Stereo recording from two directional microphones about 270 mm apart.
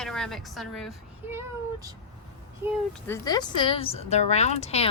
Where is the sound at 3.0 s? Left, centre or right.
Centre.